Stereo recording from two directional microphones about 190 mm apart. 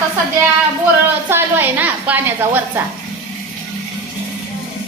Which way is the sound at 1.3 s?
10° right (ahead or behind).